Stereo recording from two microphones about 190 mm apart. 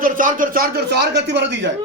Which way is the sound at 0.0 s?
45° right (ahead or behind).